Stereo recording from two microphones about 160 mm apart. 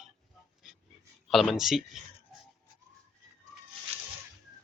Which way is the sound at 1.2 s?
Centre (ahead or behind).